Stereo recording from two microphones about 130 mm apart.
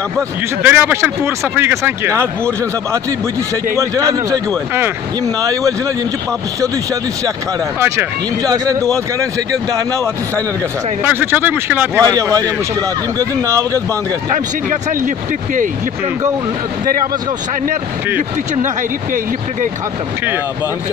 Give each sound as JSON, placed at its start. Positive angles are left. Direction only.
{"t": 0.6, "sound": "speech", "side_deg": -15}
{"t": 3.7, "sound": "speech", "side_deg": -25}
{"t": 11.1, "sound": "speech", "side_deg": -15}
{"t": 13.2, "sound": "speech", "side_deg": -25}